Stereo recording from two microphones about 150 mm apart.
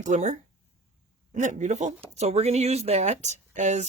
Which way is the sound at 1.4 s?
50° right (ahead or behind).